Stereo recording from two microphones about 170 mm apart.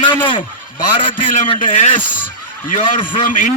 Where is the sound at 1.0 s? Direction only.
50° left (ahead or behind).